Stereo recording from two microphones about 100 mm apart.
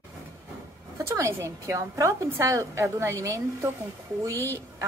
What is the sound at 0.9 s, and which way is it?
A woman's voice, 30° right (ahead or behind).